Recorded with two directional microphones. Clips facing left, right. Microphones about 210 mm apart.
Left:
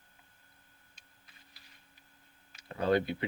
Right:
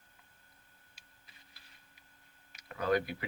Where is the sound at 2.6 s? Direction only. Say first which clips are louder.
Left 3 dB; 30° left (ahead or behind).